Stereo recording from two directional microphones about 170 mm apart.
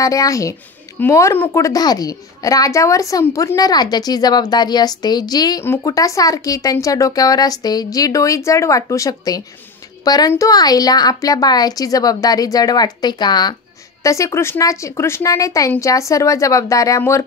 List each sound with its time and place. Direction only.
0.0 s a woman's voice: 20° left (ahead or behind)